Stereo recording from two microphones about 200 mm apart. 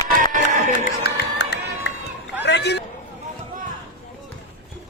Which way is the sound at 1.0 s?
55° left (ahead or behind).